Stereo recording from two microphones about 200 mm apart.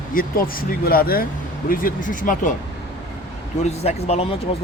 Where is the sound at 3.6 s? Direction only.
30° left (ahead or behind).